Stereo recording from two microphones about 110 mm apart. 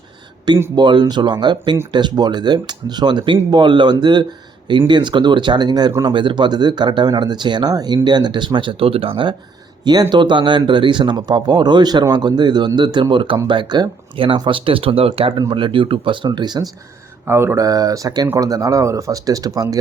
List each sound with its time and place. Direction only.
0.8 s speech: 45° right (ahead or behind)
9.8 s speech: 40° right (ahead or behind); by 15.3 s 60° right (ahead or behind)
15.3 s speech: 40° right (ahead or behind)
17.2 s speech: 20° right (ahead or behind)